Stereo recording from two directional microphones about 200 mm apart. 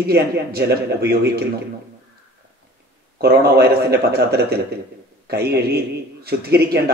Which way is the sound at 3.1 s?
50° right (ahead or behind).